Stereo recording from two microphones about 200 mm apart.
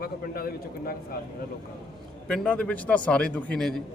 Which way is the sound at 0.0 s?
50° left (ahead or behind).